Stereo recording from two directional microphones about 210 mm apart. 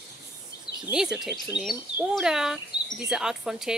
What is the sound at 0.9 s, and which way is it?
Speech, 5° right (ahead or behind).